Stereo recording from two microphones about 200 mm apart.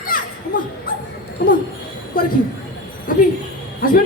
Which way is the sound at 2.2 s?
45° left (ahead or behind).